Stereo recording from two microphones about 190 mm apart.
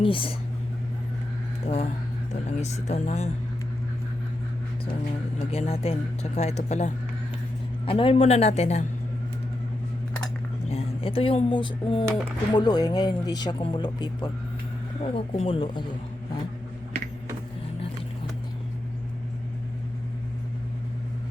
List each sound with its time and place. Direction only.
0.0 s speech: 25° left (ahead or behind)
1.6 s speech: 35° left (ahead or behind)
5.5 s speech: 30° left (ahead or behind)
10.7 s speech: 30° left (ahead or behind)